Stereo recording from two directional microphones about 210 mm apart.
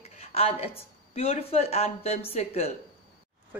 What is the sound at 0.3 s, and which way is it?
A woman's voice, 30° left (ahead or behind).